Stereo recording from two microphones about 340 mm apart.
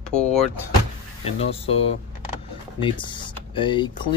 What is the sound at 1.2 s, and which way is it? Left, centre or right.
Speech, centre.